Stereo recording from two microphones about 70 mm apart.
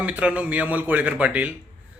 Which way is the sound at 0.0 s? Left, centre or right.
Centre.